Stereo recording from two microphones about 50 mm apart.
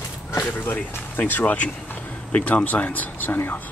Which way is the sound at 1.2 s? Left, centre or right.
Left.